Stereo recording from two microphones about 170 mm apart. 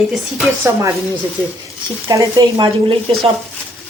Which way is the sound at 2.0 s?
20° right (ahead or behind).